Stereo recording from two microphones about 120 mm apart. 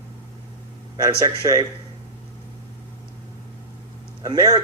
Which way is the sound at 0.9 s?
30° right (ahead or behind).